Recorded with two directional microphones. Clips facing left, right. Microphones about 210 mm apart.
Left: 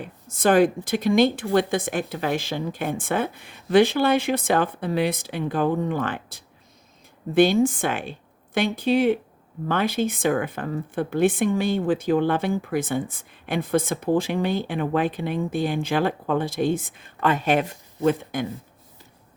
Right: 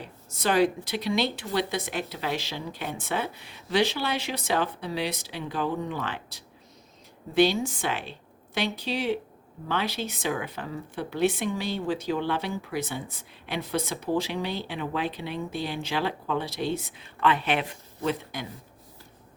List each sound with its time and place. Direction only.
0.0 s speech: 50° left (ahead or behind)